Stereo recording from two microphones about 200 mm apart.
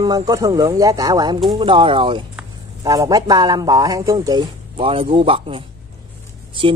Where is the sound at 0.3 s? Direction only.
15° right (ahead or behind).